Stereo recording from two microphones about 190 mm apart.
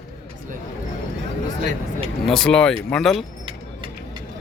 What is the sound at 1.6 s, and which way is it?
Speech, 40° right (ahead or behind).